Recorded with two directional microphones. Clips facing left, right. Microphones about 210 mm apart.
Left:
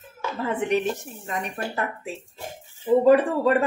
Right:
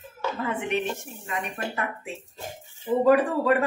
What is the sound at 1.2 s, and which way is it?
A woman's voice, 35° left (ahead or behind).